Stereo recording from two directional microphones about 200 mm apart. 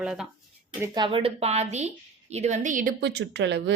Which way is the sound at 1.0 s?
25° right (ahead or behind).